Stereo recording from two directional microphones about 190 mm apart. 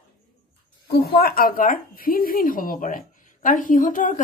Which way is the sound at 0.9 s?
55° left (ahead or behind).